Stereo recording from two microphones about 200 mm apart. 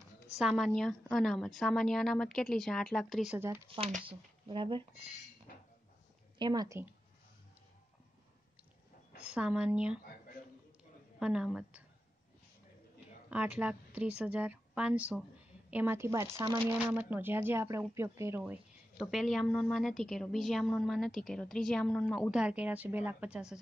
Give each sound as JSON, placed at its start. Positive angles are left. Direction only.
{"t": 0.4, "sound": "speech", "side_deg": 0}
{"t": 3.3, "sound": "speech", "side_deg": -10}
{"t": 3.6, "sound": "speech", "side_deg": -30}
{"t": 6.3, "sound": "speech", "side_deg": -20}
{"t": 9.2, "sound": "speech", "side_deg": -5}
{"t": 11.1, "sound": "speech", "side_deg": -5}
{"t": 13.3, "sound": "a woman's voice", "side_deg": -5}
{"t": 16.7, "sound": "speech", "side_deg": -5}